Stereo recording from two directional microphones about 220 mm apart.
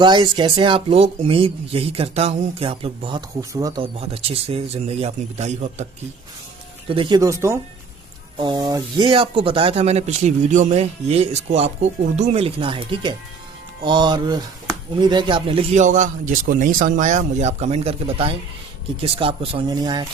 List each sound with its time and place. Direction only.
0.0 s speech: 20° right (ahead or behind)
4.0 s speech: 25° right (ahead or behind)
6.8 s speech: 25° right (ahead or behind)